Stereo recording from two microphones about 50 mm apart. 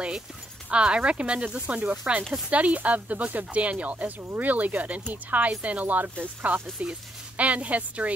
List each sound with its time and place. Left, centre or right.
0.7 s speech: right